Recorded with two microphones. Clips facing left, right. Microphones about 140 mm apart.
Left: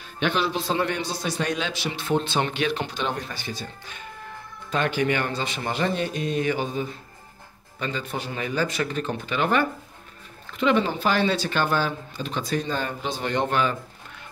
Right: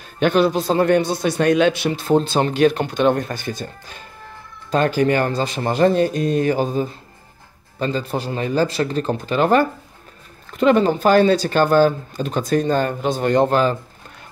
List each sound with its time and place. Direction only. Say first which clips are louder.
0.0 s a man's voice: right 9 dB; 45° right (ahead or behind)